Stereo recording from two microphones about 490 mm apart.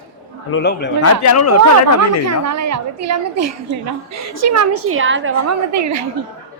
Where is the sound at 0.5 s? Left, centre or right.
Left.